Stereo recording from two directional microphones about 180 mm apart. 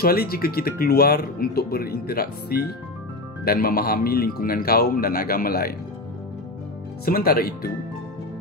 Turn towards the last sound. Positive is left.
turn(degrees=55)  # may be behind; listen again after turning